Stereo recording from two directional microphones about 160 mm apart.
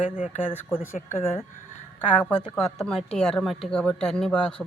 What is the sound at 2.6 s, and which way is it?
Speech, 5° left (ahead or behind).